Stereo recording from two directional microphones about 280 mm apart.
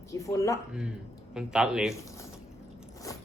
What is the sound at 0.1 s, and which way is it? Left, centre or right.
Speech, centre.